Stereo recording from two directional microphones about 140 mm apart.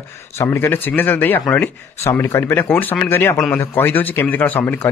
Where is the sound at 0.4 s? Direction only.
15° left (ahead or behind).